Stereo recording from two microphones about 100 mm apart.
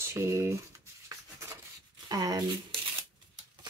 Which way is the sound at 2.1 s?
40° right (ahead or behind).